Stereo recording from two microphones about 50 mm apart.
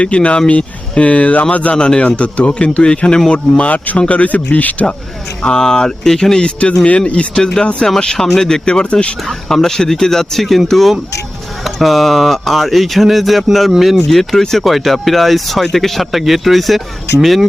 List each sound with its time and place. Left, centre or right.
0.0 s speech: left
1.7 s speech: centre
5.4 s speech: centre
6.4 s speech: left
9.2 s speech: centre